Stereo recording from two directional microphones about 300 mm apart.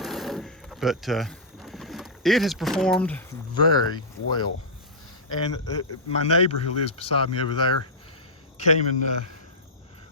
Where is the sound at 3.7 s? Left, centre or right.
Centre.